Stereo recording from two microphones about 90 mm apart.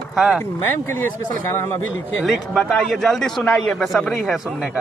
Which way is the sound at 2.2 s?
Centre (ahead or behind).